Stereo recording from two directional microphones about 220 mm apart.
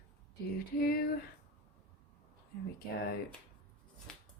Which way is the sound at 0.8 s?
45° left (ahead or behind).